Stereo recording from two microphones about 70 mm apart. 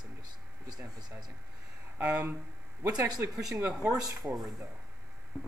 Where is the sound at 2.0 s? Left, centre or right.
Centre.